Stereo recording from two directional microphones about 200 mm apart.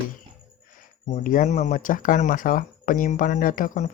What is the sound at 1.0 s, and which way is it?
Speech, 40° left (ahead or behind).